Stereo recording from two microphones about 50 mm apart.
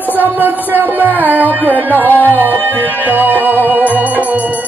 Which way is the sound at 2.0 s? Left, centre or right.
Left.